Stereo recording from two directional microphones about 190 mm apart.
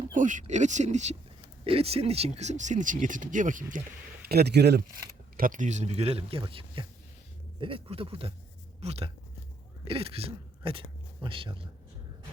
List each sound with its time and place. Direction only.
0.1 s speech: 45° right (ahead or behind)
4.3 s speech: 60° right (ahead or behind)
5.4 s speech: 45° right (ahead or behind); by 11.7 s 25° right (ahead or behind)